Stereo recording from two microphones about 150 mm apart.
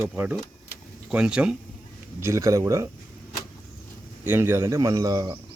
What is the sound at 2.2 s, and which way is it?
Speech, 20° right (ahead or behind).